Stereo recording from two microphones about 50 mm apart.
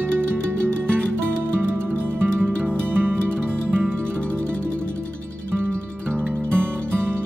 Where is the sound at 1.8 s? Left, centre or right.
Right.